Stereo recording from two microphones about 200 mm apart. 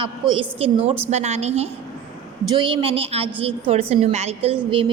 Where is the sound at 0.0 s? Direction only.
25° right (ahead or behind).